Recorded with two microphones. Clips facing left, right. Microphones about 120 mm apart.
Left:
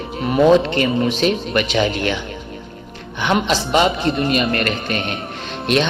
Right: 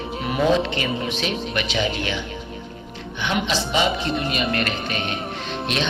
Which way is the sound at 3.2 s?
55° left (ahead or behind).